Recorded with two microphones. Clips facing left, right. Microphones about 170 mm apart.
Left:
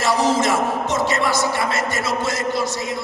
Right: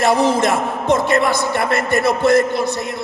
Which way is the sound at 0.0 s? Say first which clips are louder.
Right 3 dB; 55° right (ahead or behind).